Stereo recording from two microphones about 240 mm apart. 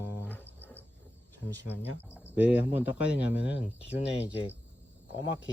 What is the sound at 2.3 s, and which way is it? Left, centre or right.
Speech, centre.